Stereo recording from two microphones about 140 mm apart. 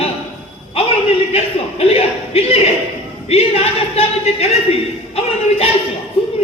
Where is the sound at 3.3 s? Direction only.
45° left (ahead or behind).